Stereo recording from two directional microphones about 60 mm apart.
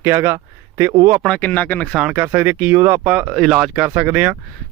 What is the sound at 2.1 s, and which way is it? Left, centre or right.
Speech, right.